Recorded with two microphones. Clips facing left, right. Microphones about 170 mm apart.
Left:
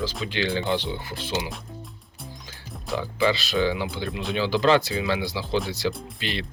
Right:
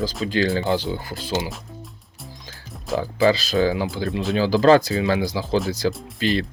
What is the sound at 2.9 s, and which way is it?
Speech, 40° right (ahead or behind).